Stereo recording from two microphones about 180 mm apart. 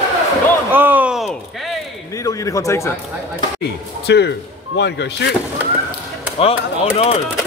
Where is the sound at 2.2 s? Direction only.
20° left (ahead or behind).